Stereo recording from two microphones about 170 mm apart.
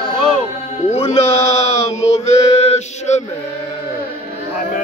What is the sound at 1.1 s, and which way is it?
Chant, 40° left (ahead or behind).